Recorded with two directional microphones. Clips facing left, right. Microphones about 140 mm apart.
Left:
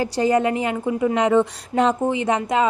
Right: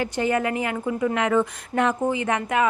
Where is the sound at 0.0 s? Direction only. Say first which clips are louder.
Left 4 dB; 35° left (ahead or behind).